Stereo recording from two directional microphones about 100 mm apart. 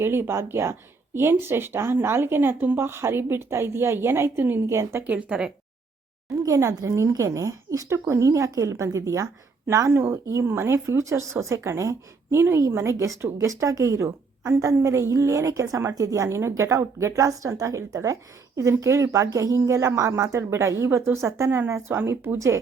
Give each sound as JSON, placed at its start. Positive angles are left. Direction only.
{"t": 0.0, "sound": "speech", "side_deg": -25}
{"t": 5.0, "sound": "speech", "side_deg": -15}
{"t": 6.4, "sound": "a woman's voice", "side_deg": -30}